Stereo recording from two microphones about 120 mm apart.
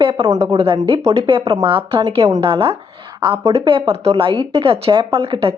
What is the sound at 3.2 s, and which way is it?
Speech, 40° right (ahead or behind).